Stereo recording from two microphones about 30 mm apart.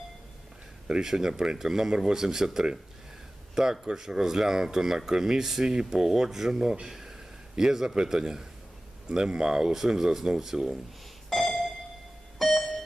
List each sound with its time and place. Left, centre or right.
1.0 s speech: centre
6.8 s a sound: centre
7.5 s a man's voice: centre
9.7 s speech: centre
11.3 s music: centre